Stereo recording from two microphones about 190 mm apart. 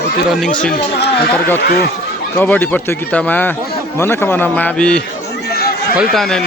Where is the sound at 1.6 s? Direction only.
55° left (ahead or behind).